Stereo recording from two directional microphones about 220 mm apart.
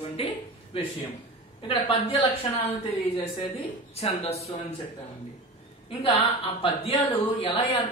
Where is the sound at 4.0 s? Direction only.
30° left (ahead or behind).